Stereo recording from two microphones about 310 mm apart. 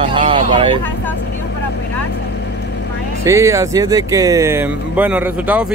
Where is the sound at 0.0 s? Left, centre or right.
Centre.